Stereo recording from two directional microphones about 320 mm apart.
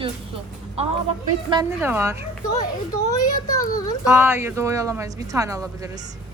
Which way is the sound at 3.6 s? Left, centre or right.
Left.